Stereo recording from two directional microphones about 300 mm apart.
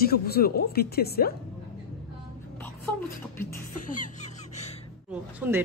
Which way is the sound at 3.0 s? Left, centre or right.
Centre.